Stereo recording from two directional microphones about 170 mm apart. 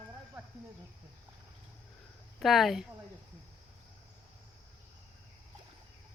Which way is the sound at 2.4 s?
Centre (ahead or behind).